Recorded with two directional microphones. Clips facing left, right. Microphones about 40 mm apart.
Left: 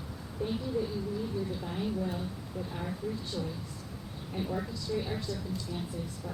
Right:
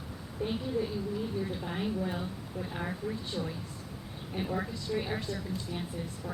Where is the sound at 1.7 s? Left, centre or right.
Right.